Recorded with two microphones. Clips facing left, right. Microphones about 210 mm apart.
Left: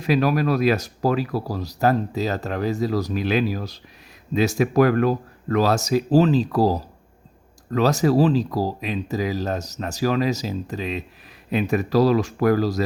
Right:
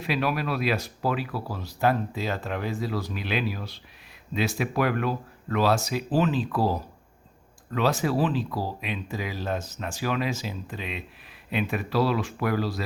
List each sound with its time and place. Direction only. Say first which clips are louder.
0.0 s speech: left 7 dB; 40° left (ahead or behind)